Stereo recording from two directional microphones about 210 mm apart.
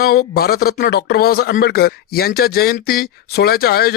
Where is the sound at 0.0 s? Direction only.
45° left (ahead or behind).